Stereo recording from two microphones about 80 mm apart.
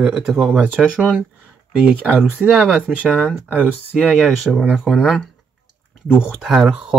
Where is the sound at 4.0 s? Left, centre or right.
Centre.